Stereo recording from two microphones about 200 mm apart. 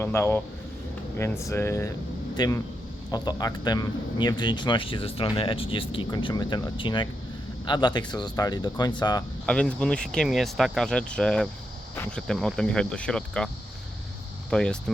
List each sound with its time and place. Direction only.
0.0 s a man's voice: 10° left (ahead or behind)
9.5 s speech: 5° left (ahead or behind)
14.5 s speech: 5° left (ahead or behind)